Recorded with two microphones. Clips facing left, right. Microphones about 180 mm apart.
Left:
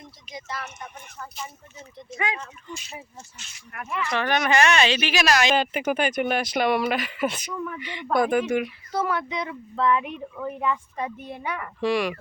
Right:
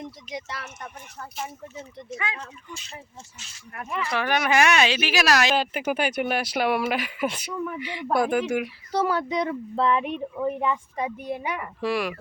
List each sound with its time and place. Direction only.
0.0 s speech: 75° right (ahead or behind)
2.3 s speech: 15° left (ahead or behind)
2.7 s speech: 10° right (ahead or behind)
4.0 s speech: 10° right (ahead or behind)
8.9 s speech: 35° right (ahead or behind); by 12.1 s 5° right (ahead or behind)